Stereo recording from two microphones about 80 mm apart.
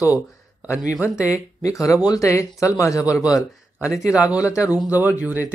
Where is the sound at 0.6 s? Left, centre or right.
Left.